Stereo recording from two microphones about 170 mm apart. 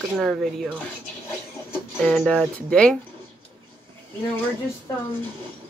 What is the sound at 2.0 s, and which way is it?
Speech, 5° left (ahead or behind).